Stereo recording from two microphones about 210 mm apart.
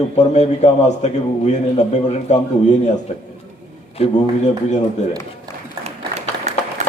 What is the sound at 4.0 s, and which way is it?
Speech, 30° left (ahead or behind).